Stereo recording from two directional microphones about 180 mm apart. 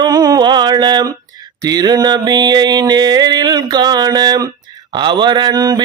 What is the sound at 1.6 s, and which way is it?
Mantra, 20° right (ahead or behind).